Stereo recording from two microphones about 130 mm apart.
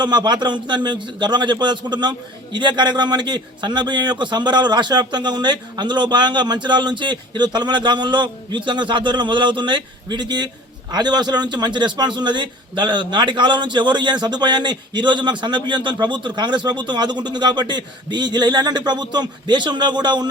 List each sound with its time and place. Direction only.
0.0 s a man's voice: 35° right (ahead or behind)